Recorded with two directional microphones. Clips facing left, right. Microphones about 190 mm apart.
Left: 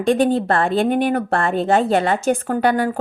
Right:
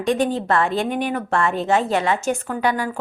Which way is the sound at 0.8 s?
55° left (ahead or behind).